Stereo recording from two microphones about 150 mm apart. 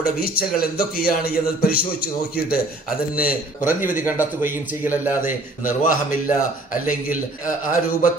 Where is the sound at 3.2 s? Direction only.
10° right (ahead or behind).